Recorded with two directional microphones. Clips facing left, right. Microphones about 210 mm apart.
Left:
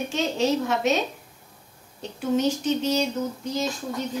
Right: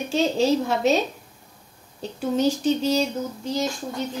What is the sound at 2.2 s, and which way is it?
Speech, 35° right (ahead or behind).